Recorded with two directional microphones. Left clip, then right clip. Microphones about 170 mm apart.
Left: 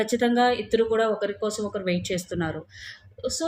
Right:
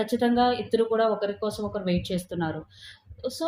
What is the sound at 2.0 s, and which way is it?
Speech, 90° left.